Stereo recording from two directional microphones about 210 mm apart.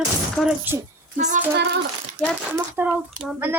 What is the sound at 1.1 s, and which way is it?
Speech, 35° right (ahead or behind).